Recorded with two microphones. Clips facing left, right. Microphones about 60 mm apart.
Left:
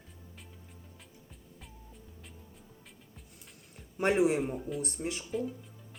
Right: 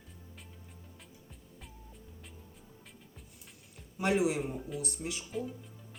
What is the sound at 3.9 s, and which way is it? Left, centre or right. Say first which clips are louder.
Speech: left 3 dB; left.